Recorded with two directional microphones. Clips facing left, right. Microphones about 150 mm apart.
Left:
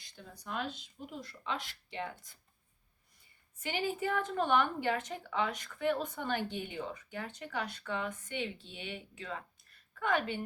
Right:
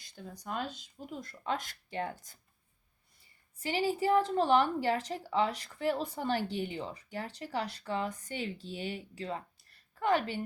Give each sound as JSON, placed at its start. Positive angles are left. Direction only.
{"t": 0.4, "sound": "a woman's voice", "side_deg": -40}
{"t": 3.6, "sound": "a woman's voice", "side_deg": -35}